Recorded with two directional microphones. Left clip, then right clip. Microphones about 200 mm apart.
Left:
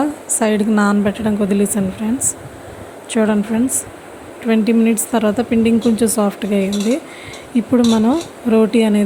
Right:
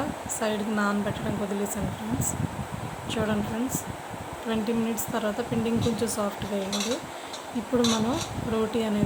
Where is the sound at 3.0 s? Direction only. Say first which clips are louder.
Left 12 dB; 35° left (ahead or behind).